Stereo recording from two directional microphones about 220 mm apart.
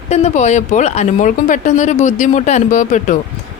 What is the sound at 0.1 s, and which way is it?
Speech, 30° left (ahead or behind).